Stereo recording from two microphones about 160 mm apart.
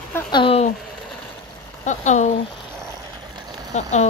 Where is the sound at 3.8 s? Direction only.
45° left (ahead or behind).